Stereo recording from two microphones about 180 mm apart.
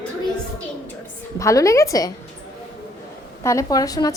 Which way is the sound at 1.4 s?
15° left (ahead or behind).